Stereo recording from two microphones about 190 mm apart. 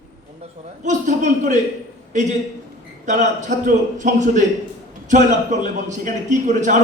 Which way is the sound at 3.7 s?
40° right (ahead or behind).